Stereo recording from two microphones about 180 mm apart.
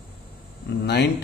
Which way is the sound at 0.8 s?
70° left (ahead or behind).